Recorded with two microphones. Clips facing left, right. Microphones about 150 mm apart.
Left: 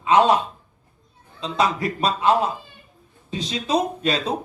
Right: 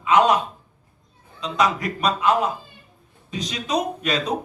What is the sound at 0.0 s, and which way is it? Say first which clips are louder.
Speech: left 1 dB; 30° left (ahead or behind).